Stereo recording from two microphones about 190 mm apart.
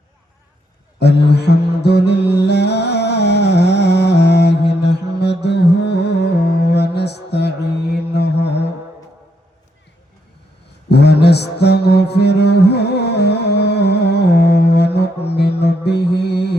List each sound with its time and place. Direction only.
0.9 s mantra: 60° left (ahead or behind)
10.8 s mantra: 60° left (ahead or behind)